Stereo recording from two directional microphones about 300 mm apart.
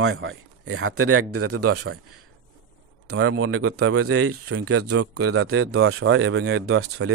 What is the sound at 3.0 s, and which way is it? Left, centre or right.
A man's voice, right.